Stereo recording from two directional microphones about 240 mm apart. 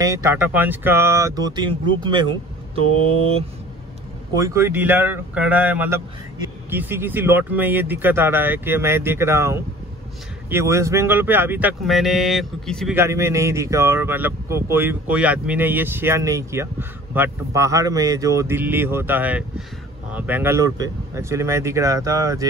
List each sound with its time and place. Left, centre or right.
0.0 s speech: centre
4.3 s speech: centre
12.9 s speech: centre